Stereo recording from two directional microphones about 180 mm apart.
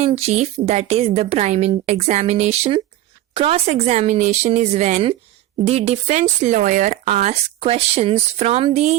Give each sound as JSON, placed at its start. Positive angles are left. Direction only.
{"t": 0.0, "sound": "speech", "side_deg": -35}